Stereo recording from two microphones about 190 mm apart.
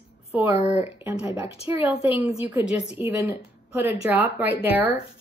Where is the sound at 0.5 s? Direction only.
35° left (ahead or behind).